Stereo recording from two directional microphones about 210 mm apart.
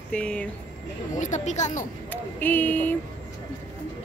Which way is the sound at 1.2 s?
35° left (ahead or behind).